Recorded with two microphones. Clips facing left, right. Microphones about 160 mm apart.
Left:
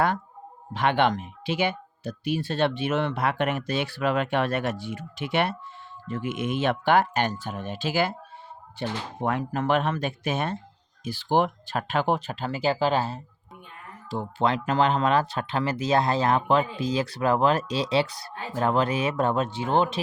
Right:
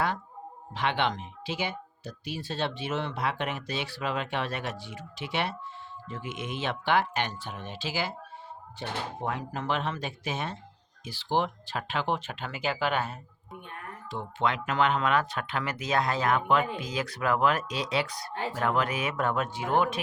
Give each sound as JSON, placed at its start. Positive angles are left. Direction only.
{"t": 0.7, "sound": "speech", "side_deg": 50}
{"t": 9.2, "sound": "speech", "side_deg": 60}